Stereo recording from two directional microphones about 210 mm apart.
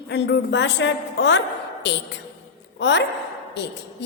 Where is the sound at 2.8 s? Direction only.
60° left (ahead or behind).